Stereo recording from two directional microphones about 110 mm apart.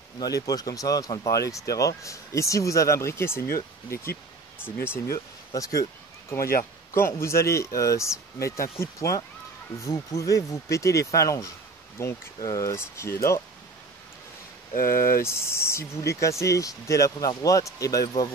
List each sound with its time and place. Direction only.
0.2 s speech: 35° left (ahead or behind)
15.2 s speech: 25° left (ahead or behind)